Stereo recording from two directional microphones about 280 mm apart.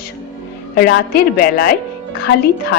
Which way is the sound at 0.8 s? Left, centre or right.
Left.